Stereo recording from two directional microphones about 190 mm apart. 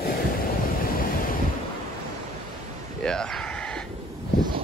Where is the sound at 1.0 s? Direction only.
45° left (ahead or behind).